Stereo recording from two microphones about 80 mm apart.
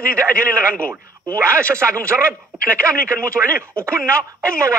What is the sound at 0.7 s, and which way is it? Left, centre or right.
Speech, centre.